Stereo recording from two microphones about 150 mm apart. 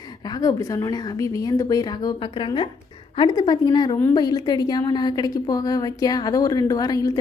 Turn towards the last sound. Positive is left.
turn(degrees=25)  # may be behind; listen again after turning